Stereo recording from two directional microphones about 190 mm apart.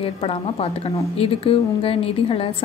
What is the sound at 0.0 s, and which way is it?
A woman's voice, 30° left (ahead or behind).